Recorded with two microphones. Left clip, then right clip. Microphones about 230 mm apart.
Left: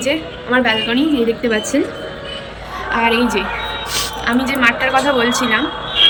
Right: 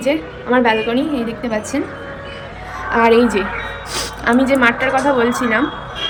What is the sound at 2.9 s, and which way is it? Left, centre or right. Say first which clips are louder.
A woman's voice: right 3 dB; centre.